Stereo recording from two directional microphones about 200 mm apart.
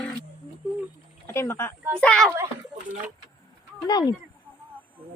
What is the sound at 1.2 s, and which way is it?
A woman's voice, 15° left (ahead or behind).